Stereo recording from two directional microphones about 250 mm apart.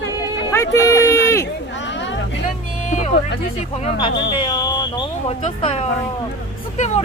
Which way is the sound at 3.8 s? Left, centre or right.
Centre.